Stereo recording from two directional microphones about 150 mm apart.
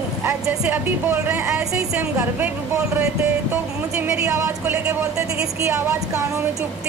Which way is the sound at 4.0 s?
20° right (ahead or behind).